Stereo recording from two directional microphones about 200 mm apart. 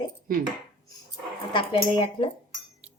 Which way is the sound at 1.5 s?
25° left (ahead or behind).